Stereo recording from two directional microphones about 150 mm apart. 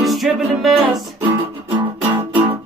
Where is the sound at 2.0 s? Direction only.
15° right (ahead or behind).